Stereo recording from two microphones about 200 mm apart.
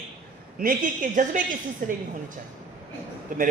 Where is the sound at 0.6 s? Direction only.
40° right (ahead or behind).